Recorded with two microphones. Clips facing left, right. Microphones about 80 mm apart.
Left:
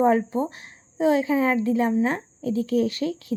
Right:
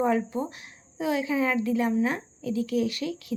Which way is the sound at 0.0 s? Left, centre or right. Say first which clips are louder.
Left 5 dB; left.